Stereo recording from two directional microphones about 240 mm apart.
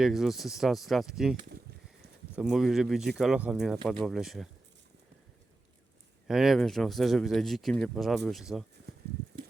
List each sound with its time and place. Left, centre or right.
0.0 s speech: centre
6.2 s speech: centre